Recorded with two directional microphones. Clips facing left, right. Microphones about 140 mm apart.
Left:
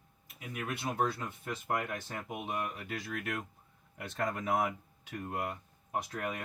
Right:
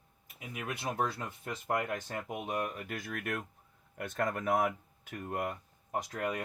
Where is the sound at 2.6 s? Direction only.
50° right (ahead or behind).